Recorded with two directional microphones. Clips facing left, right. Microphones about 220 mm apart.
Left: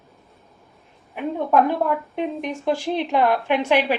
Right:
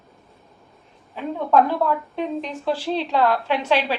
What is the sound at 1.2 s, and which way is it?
A woman's voice, 15° left (ahead or behind).